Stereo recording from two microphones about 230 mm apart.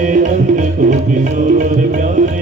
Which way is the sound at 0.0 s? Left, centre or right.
Right.